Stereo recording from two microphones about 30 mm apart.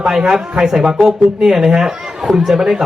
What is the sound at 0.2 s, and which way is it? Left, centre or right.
Speech, right.